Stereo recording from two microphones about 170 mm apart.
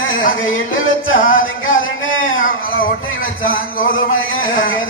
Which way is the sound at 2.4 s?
55° left (ahead or behind).